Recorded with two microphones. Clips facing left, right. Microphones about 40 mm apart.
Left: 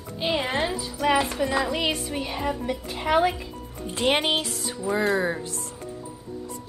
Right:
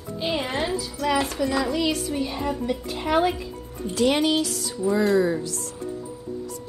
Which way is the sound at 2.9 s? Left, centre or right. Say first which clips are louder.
Left 1 dB; centre.